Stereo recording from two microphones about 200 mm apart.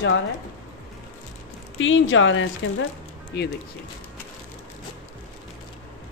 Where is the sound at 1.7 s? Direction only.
75° left (ahead or behind).